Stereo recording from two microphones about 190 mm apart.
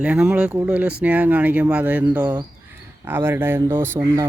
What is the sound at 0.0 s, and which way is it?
Speech, 5° right (ahead or behind).